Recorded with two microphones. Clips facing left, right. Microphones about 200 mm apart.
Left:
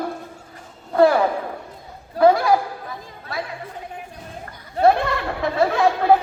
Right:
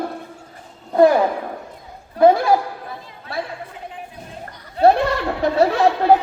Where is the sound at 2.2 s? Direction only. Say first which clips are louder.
Right 2 dB; 35° left (ahead or behind).